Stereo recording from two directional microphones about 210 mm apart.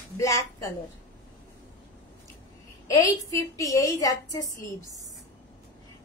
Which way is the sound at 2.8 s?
15° left (ahead or behind).